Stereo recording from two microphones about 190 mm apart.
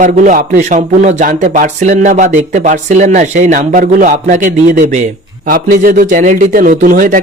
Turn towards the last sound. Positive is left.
turn(degrees=-45)  # may be behind; listen again after turning